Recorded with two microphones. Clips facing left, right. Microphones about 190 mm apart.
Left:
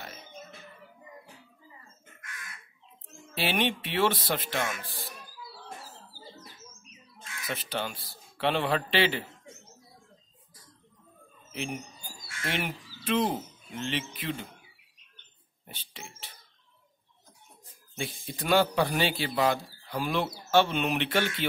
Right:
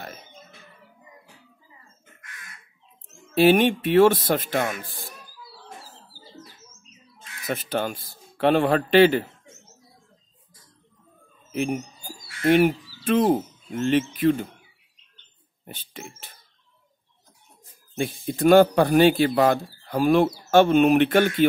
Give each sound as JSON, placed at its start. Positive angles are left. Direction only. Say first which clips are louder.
{"t": 3.3, "sound": "speech", "louder": "right 12 dB", "side_deg": -45}
{"t": 7.4, "sound": "speech", "louder": "right 8 dB", "side_deg": -45}
{"t": 11.6, "sound": "a sound", "louder": "right 9 dB", "side_deg": -45}
{"t": 12.4, "sound": "speech", "louder": "right 15 dB", "side_deg": -50}
{"t": 15.6, "sound": "speech", "louder": "right 7 dB", "side_deg": -50}
{"t": 17.9, "sound": "speech", "louder": "right 10 dB", "side_deg": -50}